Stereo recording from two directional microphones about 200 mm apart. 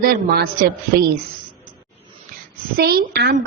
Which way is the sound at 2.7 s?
50° right (ahead or behind).